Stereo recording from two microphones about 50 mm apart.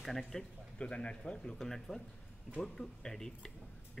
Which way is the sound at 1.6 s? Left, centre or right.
Centre.